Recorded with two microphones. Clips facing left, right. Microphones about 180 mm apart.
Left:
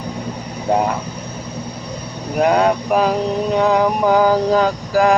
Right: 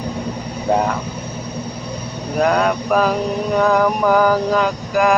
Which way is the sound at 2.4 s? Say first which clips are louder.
Left 2 dB; 20° left (ahead or behind).